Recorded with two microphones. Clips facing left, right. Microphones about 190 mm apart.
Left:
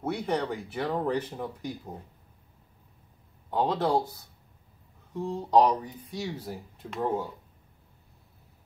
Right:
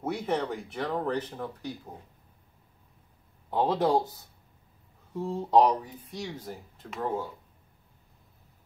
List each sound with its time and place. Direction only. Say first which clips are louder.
0.0 s speech: even; centre (ahead or behind)
0.9 s speech: left 1 dB; 10° left (ahead or behind)
3.4 s speech: even; 5° right (ahead or behind)
3.7 s speech: right 1 dB; 15° right (ahead or behind)
5.1 s speech: even; 5° right (ahead or behind); by 7.2 s 10° left (ahead or behind)